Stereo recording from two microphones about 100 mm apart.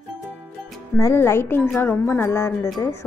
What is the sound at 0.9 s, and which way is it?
Music, 25° left (ahead or behind).